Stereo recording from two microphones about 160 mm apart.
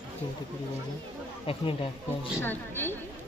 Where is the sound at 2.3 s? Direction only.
15° left (ahead or behind).